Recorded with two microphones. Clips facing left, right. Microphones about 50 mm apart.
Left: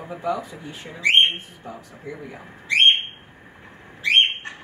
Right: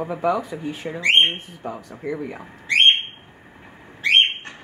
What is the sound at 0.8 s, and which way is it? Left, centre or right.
Speech, right.